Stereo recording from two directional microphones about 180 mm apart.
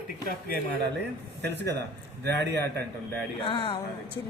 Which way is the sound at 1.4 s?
75° right (ahead or behind).